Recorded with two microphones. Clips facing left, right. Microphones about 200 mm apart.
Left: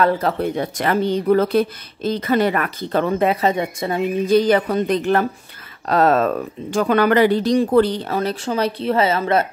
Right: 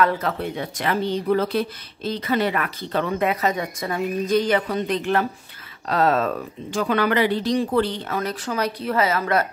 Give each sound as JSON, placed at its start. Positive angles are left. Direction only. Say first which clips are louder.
{"t": 0.0, "sound": "speech", "louder": "left 4 dB", "side_deg": 40}
{"t": 3.2, "sound": "speech", "louder": "left 4 dB", "side_deg": 30}